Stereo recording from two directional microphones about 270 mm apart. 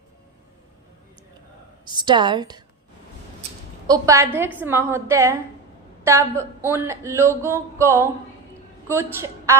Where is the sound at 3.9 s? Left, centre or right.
Centre.